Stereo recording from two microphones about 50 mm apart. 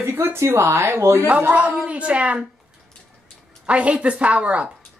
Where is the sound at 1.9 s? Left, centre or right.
Right.